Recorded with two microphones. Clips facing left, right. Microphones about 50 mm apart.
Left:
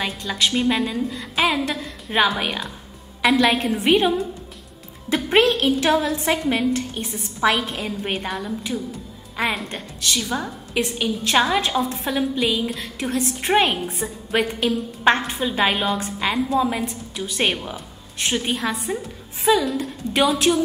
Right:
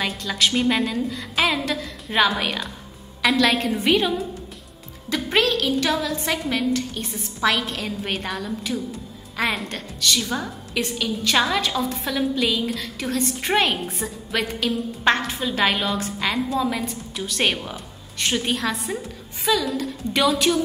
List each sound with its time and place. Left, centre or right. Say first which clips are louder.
0.3 s a woman's voice: even; centre
3.9 s a woman's voice: left 4 dB; centre
7.0 s a woman's voice: left 2 dB; centre
10.7 s a woman's voice: left 2 dB; centre
11.8 s a woman's voice: left 1 dB; centre
15.0 s a woman's voice: left 2 dB; left; by 20.5 s centre